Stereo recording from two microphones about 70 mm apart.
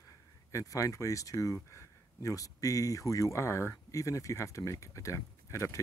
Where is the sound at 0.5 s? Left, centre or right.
Left.